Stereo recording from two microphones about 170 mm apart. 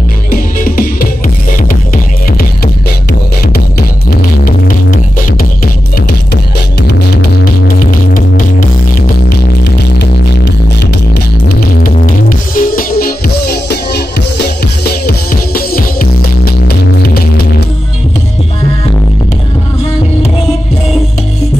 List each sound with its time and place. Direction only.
0.3 s music: 55° left (ahead or behind)
4.5 s music: 55° left (ahead or behind)
9.2 s music: 75° left (ahead or behind)
11.9 s music: 50° left (ahead or behind); by 17.6 s 65° left (ahead or behind)